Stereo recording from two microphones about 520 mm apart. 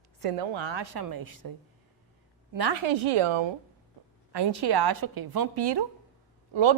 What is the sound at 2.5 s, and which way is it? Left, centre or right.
Speech, right.